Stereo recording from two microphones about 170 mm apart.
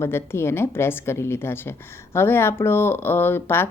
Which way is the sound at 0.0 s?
15° left (ahead or behind).